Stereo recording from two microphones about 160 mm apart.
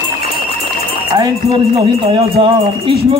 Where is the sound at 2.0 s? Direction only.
40° right (ahead or behind).